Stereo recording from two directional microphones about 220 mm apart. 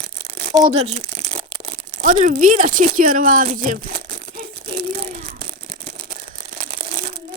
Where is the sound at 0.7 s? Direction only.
30° right (ahead or behind).